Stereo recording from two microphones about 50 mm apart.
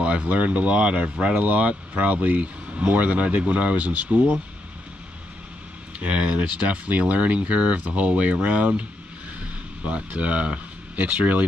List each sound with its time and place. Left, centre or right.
0.0 s speech: right
5.9 s speech: right
9.8 s speech: right